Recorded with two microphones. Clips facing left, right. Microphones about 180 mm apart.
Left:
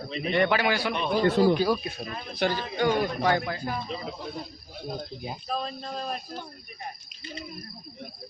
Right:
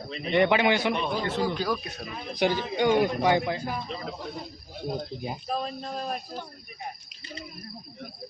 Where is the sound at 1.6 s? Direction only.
15° left (ahead or behind).